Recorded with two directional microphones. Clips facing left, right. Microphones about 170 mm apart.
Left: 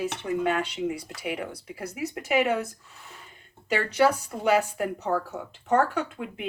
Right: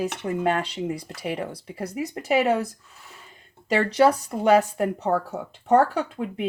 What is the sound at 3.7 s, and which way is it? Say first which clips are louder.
Speech: right 4 dB; 30° right (ahead or behind).